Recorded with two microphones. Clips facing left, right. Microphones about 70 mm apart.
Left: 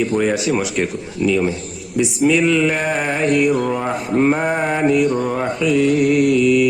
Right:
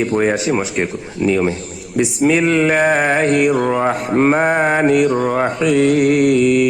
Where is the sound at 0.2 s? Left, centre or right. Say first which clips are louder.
Right 2 dB; right.